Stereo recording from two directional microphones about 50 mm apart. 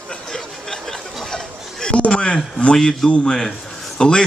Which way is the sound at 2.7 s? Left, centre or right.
Centre.